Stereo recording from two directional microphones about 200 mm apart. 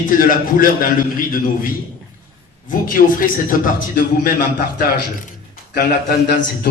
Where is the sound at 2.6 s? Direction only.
45° left (ahead or behind).